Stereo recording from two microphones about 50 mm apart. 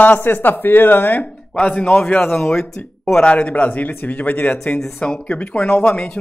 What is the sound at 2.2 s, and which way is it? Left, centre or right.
Speech, centre.